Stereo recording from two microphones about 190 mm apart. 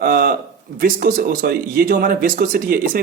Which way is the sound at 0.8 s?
50° right (ahead or behind).